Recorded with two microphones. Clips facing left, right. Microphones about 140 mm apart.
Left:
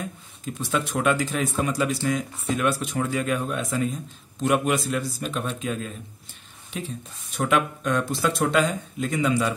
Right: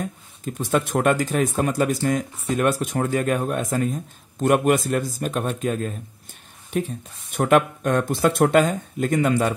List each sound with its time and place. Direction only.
0.0 s a man's voice: 45° right (ahead or behind)